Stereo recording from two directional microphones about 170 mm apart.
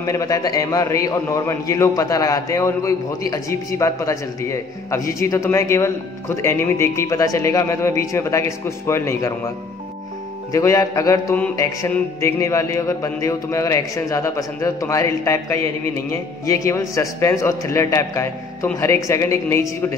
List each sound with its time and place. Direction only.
0.0 s a man's voice: 20° left (ahead or behind)
10.5 s speech: 20° left (ahead or behind)